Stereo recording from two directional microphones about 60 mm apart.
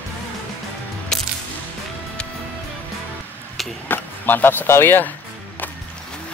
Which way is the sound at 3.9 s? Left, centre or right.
Left.